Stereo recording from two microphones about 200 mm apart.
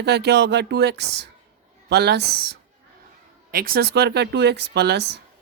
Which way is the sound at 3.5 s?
50° right (ahead or behind).